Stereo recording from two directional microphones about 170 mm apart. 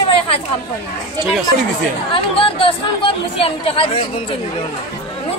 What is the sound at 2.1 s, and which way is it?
Speech, 30° left (ahead or behind).